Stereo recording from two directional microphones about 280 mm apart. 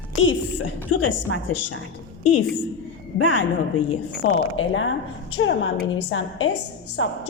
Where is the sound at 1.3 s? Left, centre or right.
Left.